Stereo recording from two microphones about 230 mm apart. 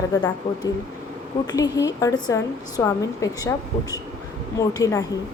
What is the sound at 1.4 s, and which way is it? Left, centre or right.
A woman's voice, centre.